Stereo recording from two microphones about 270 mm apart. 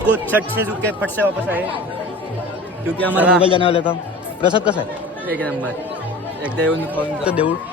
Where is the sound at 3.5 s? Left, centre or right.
Centre.